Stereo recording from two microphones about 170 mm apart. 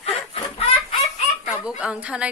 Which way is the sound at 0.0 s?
35° left (ahead or behind).